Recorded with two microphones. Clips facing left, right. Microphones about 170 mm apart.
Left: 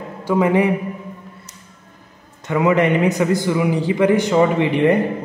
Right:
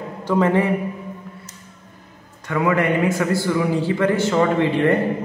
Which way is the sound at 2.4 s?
20° left (ahead or behind).